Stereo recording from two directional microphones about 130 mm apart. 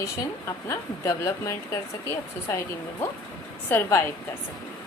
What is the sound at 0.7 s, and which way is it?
A woman's voice, 25° left (ahead or behind).